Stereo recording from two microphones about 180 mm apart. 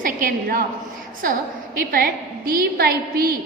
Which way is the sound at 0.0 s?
50° right (ahead or behind).